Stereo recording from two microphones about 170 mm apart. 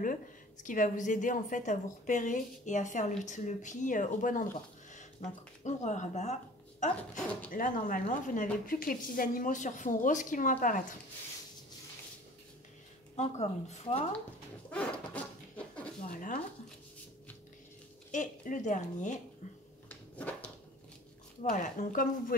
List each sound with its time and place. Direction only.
0.7 s a woman's voice: 50° left (ahead or behind)
7.5 s a woman's voice: 55° left (ahead or behind)
13.1 s speech: 40° left (ahead or behind)
14.7 s a sound: 5° left (ahead or behind)
16.0 s a sound: 50° left (ahead or behind)
18.1 s a woman's voice: 45° left (ahead or behind)
19.9 s dog: 10° left (ahead or behind)
21.5 s a woman's voice: 50° left (ahead or behind)